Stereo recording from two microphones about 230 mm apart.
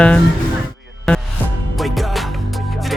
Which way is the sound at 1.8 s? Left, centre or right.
Centre.